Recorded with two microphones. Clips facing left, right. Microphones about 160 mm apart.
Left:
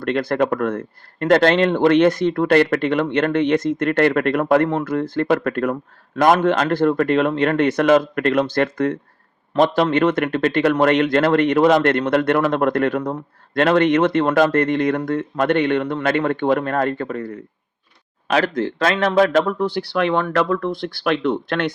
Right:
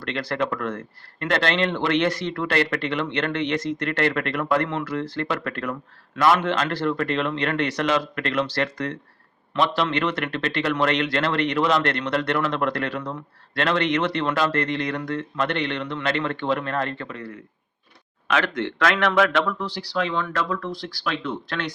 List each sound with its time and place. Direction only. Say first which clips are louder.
0.0 s a man's voice: left 7 dB; 50° left (ahead or behind)